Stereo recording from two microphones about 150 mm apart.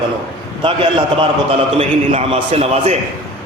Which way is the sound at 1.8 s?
45° right (ahead or behind).